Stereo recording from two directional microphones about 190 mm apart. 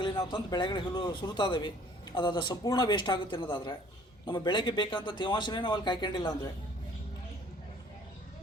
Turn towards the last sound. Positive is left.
turn(degrees=20)  # may be behind; listen again after turning